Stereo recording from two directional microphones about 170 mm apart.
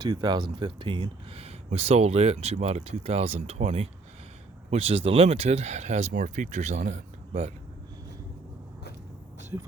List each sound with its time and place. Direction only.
0.0 s speech: 25° right (ahead or behind); by 7.5 s 40° right (ahead or behind)